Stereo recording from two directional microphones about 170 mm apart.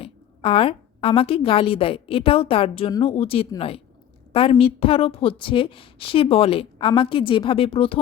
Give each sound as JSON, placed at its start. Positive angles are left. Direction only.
{"t": 0.0, "sound": "a woman's voice", "side_deg": 35}